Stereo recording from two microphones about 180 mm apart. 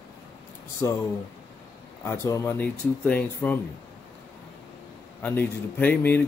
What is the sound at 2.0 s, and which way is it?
Speech, 15° left (ahead or behind).